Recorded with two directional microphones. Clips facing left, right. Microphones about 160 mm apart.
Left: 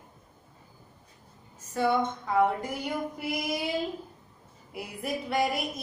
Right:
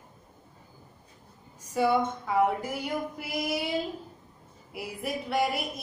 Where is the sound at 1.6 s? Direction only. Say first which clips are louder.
Right 1 dB; 10° right (ahead or behind).